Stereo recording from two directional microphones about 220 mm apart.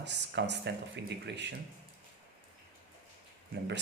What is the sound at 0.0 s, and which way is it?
Speech, 50° right (ahead or behind).